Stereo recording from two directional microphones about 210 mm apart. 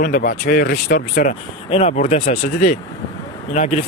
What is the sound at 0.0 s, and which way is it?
Speech, 45° left (ahead or behind).